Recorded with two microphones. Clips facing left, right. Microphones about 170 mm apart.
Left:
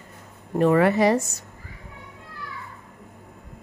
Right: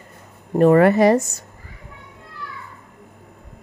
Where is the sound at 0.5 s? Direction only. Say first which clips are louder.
Right 5 dB; 45° right (ahead or behind).